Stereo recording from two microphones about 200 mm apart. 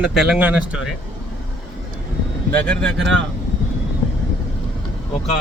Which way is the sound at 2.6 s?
5° left (ahead or behind).